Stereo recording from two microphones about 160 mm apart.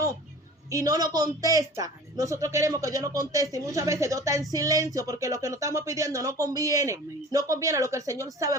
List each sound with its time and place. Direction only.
0.7 s speech: 20° right (ahead or behind)